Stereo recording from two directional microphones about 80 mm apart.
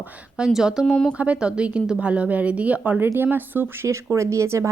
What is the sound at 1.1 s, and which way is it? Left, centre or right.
A woman's voice, centre.